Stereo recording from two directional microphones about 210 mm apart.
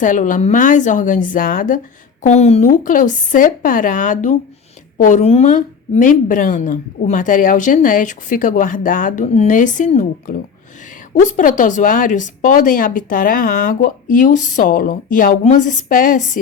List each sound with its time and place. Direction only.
0.0 s a woman's voice: 35° left (ahead or behind)